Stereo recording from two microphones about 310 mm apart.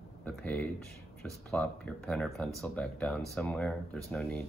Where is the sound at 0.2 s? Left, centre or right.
Centre.